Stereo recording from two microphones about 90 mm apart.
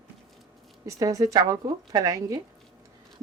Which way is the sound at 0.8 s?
40° right (ahead or behind).